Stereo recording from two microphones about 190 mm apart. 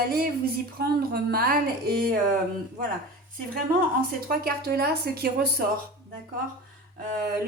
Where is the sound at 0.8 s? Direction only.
55° right (ahead or behind).